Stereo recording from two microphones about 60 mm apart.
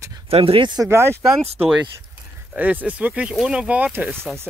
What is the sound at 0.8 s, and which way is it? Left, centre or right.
Speech, right.